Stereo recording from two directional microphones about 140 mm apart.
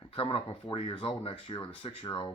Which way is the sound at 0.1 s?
40° left (ahead or behind).